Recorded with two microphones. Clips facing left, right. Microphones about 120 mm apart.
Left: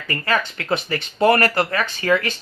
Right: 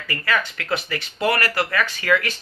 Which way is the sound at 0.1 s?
30° left (ahead or behind).